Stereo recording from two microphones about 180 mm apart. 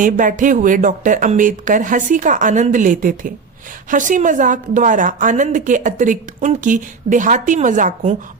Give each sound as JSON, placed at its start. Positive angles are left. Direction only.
{"t": 0.0, "sound": "a woman's voice", "side_deg": -45}